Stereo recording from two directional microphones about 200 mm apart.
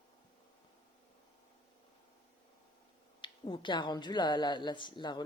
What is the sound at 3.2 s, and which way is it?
Speech, 25° left (ahead or behind).